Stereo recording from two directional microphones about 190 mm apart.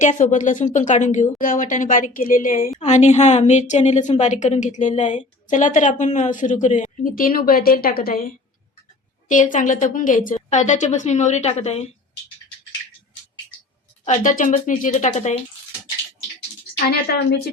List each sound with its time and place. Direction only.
0.0 s a woman's voice: 40° left (ahead or behind)
9.3 s a woman's voice: 40° left (ahead or behind)
14.3 s a woman's voice: 45° left (ahead or behind)
16.9 s a woman's voice: 55° left (ahead or behind)